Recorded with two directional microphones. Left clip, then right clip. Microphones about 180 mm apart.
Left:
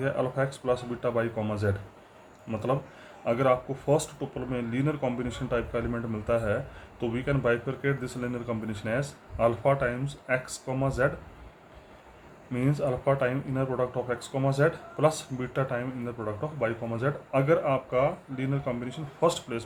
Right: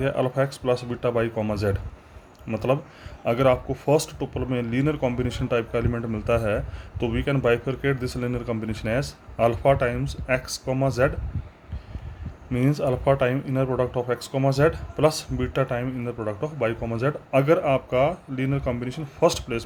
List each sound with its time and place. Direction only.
0.0 s speech: 50° right (ahead or behind)
12.5 s speech: 45° right (ahead or behind)